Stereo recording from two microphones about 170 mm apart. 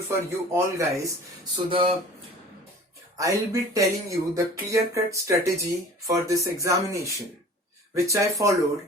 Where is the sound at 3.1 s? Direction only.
20° right (ahead or behind).